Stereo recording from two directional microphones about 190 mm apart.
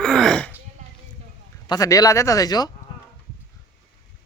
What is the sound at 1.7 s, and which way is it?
Speech, 15° left (ahead or behind).